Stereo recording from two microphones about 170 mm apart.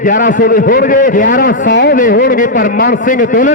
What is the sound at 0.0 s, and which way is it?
A man's voice, 50° left (ahead or behind).